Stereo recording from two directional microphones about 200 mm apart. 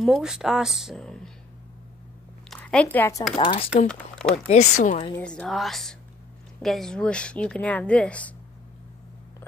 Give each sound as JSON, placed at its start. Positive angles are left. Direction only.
{"t": 0.0, "sound": "a woman's voice", "side_deg": 0}
{"t": 2.5, "sound": "speech", "side_deg": 5}
{"t": 3.3, "sound": "speech", "side_deg": 30}
{"t": 3.8, "sound": "a woman's voice", "side_deg": 5}
{"t": 4.5, "sound": "speech", "side_deg": 35}
{"t": 5.1, "sound": "a woman's voice", "side_deg": 5}